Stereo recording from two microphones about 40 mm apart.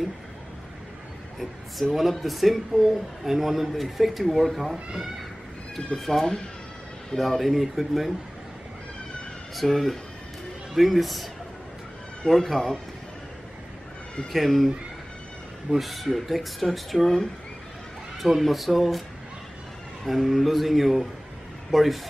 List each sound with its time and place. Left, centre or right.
2.0 s speech: centre
5.9 s speech: centre
9.6 s speech: centre
12.3 s speech: centre
14.3 s speech: centre
15.7 s speech: centre
18.2 s speech: centre
20.1 s speech: centre